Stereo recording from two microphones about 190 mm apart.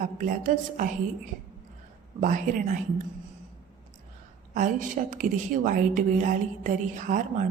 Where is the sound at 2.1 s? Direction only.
40° right (ahead or behind).